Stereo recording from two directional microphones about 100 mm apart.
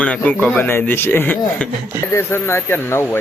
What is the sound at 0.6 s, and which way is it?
Speech, 20° left (ahead or behind).